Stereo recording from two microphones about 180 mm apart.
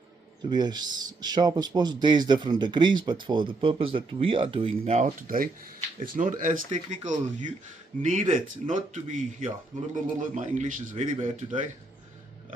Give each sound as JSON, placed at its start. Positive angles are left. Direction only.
{"t": 0.5, "sound": "a man's voice", "side_deg": -25}